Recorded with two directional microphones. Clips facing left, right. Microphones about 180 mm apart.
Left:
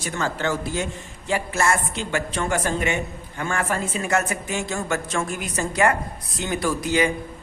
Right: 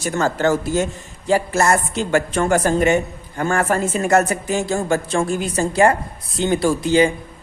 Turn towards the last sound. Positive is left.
turn(degrees=-30)  # may be behind; listen again after turning